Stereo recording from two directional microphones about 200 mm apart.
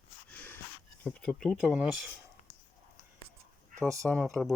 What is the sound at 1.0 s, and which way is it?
Speech, 5° left (ahead or behind).